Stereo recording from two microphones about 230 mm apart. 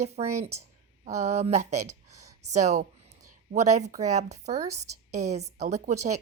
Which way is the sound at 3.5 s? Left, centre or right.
Right.